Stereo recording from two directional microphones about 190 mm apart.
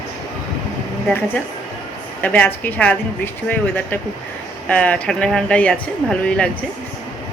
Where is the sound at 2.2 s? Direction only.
10° left (ahead or behind).